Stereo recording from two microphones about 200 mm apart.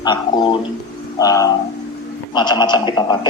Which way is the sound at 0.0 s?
25° left (ahead or behind).